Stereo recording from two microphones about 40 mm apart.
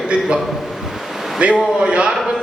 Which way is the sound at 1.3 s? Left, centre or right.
Right.